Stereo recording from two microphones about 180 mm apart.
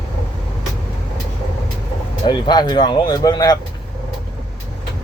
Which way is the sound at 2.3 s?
25° left (ahead or behind).